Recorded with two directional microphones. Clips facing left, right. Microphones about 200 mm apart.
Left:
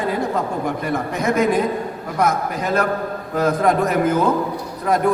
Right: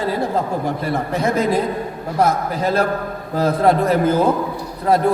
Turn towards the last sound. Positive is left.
turn(degrees=-30)  # may be behind; listen again after turning